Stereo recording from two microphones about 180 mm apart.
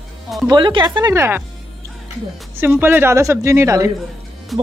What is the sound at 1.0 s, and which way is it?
Speech, 15° right (ahead or behind).